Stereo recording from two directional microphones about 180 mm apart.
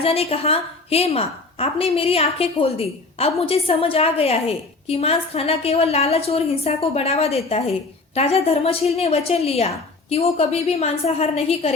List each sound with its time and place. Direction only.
0.0 s a woman's voice: 35° left (ahead or behind)